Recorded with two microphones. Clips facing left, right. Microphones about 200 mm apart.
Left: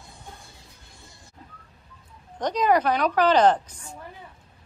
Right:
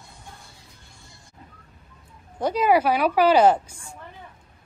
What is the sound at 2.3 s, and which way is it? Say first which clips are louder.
A woman's voice: right 2 dB; 5° right (ahead or behind).